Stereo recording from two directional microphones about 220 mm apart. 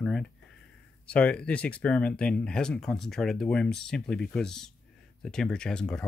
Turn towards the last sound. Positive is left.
turn(degrees=5)  # may be behind; listen again after turning